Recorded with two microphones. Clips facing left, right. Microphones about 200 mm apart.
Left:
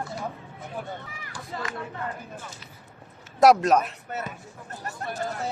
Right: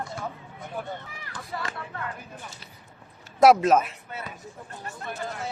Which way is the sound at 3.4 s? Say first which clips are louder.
Even; centre (ahead or behind).